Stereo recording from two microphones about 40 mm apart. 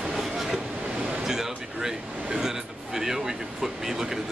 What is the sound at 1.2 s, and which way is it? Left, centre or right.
Speech, centre.